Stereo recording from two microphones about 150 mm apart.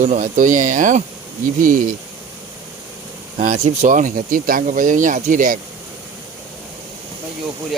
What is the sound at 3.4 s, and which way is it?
Speech, 55° right (ahead or behind).